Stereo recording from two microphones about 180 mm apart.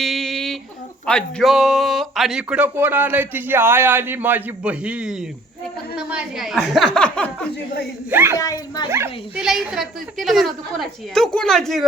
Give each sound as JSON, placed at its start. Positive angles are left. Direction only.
{"t": 0.0, "sound": "a sound", "side_deg": 0}
{"t": 1.0, "sound": "a woman's voice", "side_deg": 5}
{"t": 8.1, "sound": "speech", "side_deg": -10}
{"t": 8.4, "sound": "speech", "side_deg": 20}
{"t": 8.9, "sound": "speech", "side_deg": -15}
{"t": 9.4, "sound": "a woman's voice", "side_deg": -5}